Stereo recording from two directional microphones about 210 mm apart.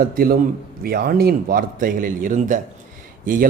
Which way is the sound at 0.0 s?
45° right (ahead or behind).